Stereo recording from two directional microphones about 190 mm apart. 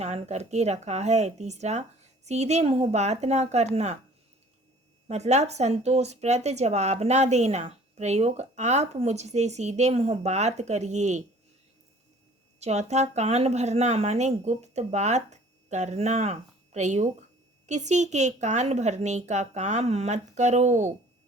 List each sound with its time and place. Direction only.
0.0 s speech: 35° right (ahead or behind)
5.0 s speech: 35° right (ahead or behind)
12.5 s speech: 35° right (ahead or behind)